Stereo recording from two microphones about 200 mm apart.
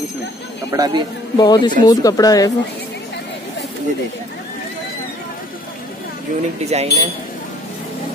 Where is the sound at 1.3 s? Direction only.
20° left (ahead or behind).